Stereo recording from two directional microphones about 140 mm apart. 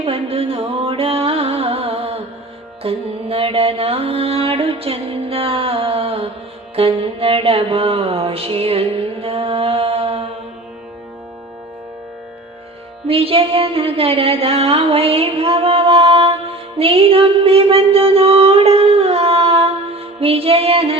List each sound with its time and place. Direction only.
0.0 s music: 45° right (ahead or behind)
9.2 s mantra: 45° right (ahead or behind)
13.1 s a sound: 45° right (ahead or behind)